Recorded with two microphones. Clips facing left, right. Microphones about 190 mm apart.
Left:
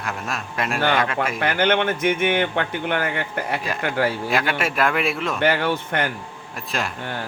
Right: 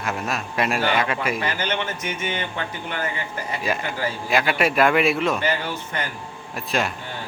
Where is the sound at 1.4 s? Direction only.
60° left (ahead or behind).